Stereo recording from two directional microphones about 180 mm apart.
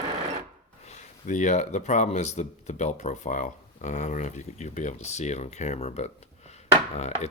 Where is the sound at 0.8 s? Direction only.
40° left (ahead or behind).